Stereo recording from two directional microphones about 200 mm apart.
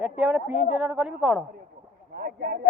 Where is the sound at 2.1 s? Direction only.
50° right (ahead or behind).